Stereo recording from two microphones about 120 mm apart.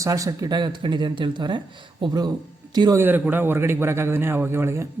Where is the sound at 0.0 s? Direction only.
25° right (ahead or behind).